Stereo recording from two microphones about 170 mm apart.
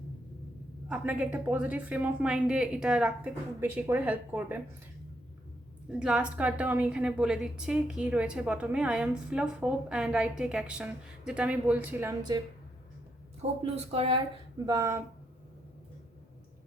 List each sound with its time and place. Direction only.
0.9 s a woman's voice: 10° right (ahead or behind)
5.9 s a woman's voice: 5° right (ahead or behind)
13.6 s speech: 35° right (ahead or behind)
14.7 s speech: 20° right (ahead or behind)